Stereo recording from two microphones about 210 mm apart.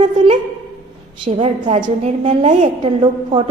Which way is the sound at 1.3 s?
35° right (ahead or behind).